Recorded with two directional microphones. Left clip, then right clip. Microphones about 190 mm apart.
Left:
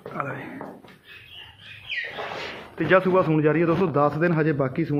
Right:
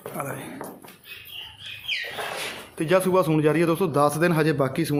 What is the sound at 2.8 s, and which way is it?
A man's voice, 15° right (ahead or behind).